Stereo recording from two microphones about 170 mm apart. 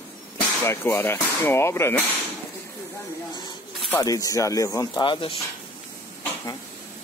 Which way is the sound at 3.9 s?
20° left (ahead or behind).